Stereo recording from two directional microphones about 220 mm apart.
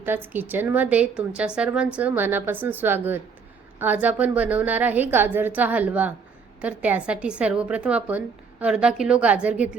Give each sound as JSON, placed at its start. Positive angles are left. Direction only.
{"t": 0.0, "sound": "a woman's voice", "side_deg": -10}